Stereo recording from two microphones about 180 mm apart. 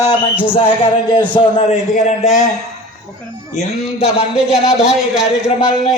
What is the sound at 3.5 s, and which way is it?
Speech, 35° left (ahead or behind).